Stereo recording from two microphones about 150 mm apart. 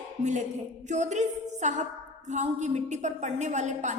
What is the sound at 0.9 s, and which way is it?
A woman's voice, 55° right (ahead or behind).